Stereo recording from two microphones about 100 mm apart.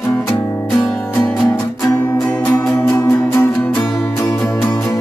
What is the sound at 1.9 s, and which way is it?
Music, 25° left (ahead or behind).